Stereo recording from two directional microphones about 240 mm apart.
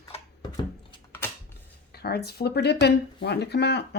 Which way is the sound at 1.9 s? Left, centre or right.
Left.